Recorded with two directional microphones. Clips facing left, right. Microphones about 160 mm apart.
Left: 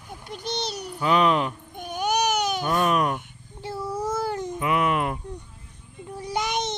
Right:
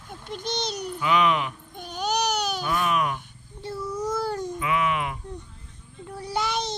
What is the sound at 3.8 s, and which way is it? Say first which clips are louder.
Child singing: left 1 dB; 25° left (ahead or behind).